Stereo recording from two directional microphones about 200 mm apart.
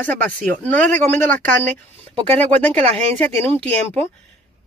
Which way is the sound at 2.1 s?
30° right (ahead or behind).